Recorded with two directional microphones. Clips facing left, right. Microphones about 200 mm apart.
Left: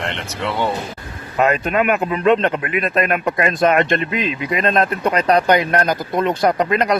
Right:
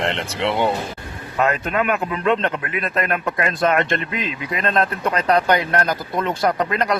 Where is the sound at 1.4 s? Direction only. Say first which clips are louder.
Left 3 dB; 20° left (ahead or behind).